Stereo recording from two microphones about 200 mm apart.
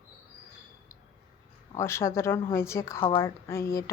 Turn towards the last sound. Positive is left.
turn(degrees=15)  # may be behind; listen again after turning